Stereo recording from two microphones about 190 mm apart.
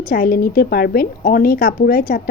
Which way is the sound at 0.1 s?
50° left (ahead or behind).